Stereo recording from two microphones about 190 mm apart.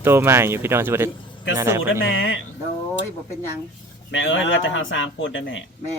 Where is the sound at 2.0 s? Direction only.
80° left.